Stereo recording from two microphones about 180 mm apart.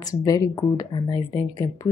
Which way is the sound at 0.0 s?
20° left (ahead or behind).